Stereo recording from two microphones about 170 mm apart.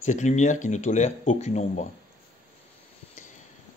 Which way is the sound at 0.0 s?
45° left (ahead or behind).